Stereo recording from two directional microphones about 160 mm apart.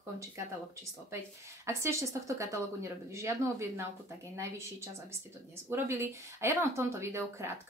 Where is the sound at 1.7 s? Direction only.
15° right (ahead or behind).